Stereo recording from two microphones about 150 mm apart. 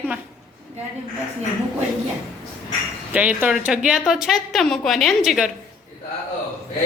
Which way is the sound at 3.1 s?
10° right (ahead or behind).